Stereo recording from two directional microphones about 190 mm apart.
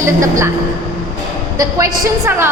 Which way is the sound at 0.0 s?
15° right (ahead or behind).